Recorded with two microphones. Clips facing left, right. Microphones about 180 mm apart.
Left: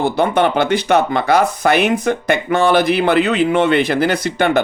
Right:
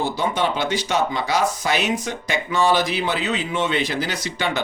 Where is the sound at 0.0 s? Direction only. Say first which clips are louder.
Left 7 dB; 60° left (ahead or behind).